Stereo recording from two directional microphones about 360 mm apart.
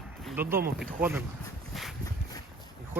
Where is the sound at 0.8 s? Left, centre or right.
Centre.